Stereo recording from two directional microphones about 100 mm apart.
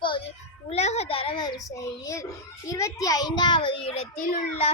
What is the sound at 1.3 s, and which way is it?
A child's voice, 40° left (ahead or behind).